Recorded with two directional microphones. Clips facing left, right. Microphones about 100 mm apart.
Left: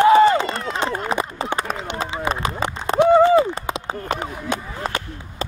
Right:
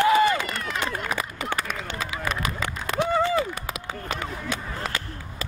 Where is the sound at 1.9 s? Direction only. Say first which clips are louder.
Left 6 dB; 25° left (ahead or behind).